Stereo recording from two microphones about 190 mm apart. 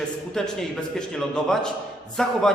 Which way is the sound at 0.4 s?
5° left (ahead or behind).